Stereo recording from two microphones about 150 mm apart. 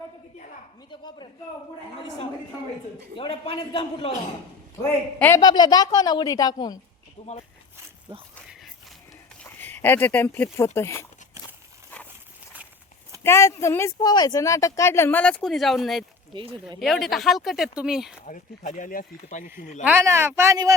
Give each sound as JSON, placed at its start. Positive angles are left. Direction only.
{"t": 0.9, "sound": "a man's voice", "side_deg": 30}
{"t": 3.2, "sound": "a man's voice", "side_deg": 35}
{"t": 4.8, "sound": "speech", "side_deg": 15}
{"t": 5.4, "sound": "a woman's voice", "side_deg": 30}
{"t": 7.2, "sound": "speech", "side_deg": 55}
{"t": 8.1, "sound": "speech", "side_deg": -30}
{"t": 9.4, "sound": "speech", "side_deg": 10}
{"t": 13.2, "sound": "speech", "side_deg": 20}
{"t": 16.3, "sound": "speech", "side_deg": -30}
{"t": 16.8, "sound": "speech", "side_deg": 0}
{"t": 18.3, "sound": "speech", "side_deg": 55}
{"t": 19.5, "sound": "speech", "side_deg": 50}
{"t": 19.8, "sound": "speech", "side_deg": -15}